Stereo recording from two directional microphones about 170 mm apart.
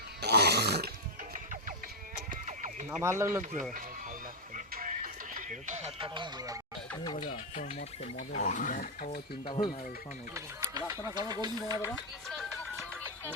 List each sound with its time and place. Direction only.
0.2 s a sound: 70° right (ahead or behind)
1.3 s music: 50° right (ahead or behind)
2.3 s sheep: 45° right (ahead or behind)
3.0 s speech: 15° right (ahead or behind)
4.5 s music: 50° right (ahead or behind)
6.0 s speech: 25° right (ahead or behind)
6.9 s speech: 25° left (ahead or behind); by 9.2 s 60° left (ahead or behind)
9.3 s speech: 30° left (ahead or behind)
10.3 s a sound: 20° right (ahead or behind)
11.0 s speech: 20° right (ahead or behind)
12.3 s music: centre (ahead or behind)